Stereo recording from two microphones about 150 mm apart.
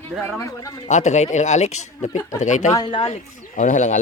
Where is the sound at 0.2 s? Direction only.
15° left (ahead or behind).